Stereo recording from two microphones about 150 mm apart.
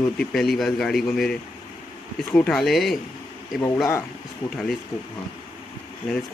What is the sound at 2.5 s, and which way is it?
Speech, centre (ahead or behind).